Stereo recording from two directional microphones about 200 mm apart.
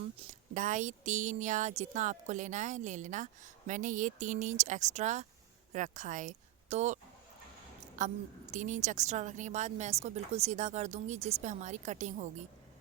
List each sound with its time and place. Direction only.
0.5 s speech: 40° right (ahead or behind)